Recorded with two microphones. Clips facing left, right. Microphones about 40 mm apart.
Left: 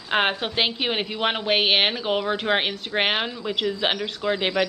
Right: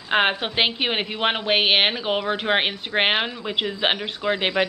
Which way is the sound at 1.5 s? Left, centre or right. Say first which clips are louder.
Right 1 dB; centre.